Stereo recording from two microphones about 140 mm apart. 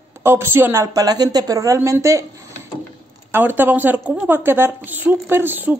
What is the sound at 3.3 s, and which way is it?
A woman's voice, 15° right (ahead or behind).